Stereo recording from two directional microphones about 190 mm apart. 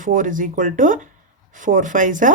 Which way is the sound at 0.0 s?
45° right (ahead or behind).